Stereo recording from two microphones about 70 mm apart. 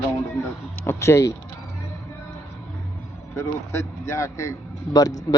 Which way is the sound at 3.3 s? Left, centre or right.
Left.